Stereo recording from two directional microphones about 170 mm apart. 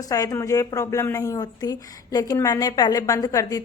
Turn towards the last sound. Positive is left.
turn(degrees=20)  # may be behind; listen again after turning